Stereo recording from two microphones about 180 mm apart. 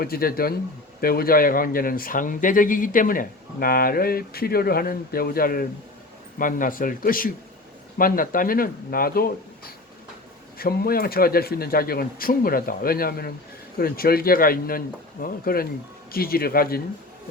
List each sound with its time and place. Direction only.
0.0 s speech: 55° left (ahead or behind)